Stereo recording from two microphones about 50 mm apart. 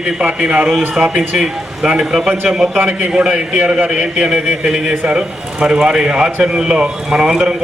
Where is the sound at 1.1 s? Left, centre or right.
Centre.